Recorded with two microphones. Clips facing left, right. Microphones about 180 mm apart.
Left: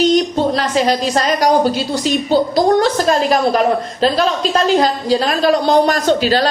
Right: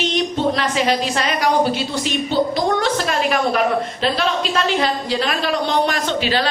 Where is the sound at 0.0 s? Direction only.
40° left (ahead or behind).